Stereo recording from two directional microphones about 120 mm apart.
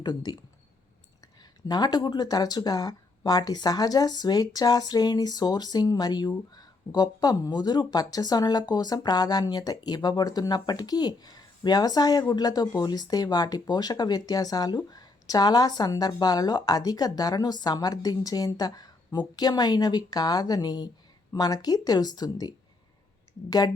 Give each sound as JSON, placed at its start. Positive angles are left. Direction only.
{"t": 0.0, "sound": "speech", "side_deg": 35}